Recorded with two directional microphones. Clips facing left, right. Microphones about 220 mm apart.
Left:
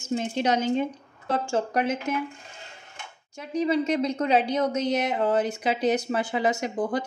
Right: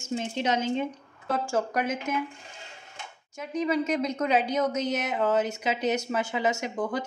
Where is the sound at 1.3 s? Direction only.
25° left (ahead or behind).